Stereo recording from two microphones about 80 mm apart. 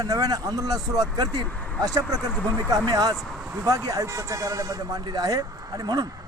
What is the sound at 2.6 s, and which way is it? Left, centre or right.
Speech, right.